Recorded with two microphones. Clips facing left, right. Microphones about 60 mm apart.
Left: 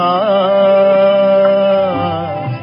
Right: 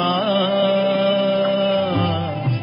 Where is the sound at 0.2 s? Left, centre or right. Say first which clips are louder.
Left 7 dB; left.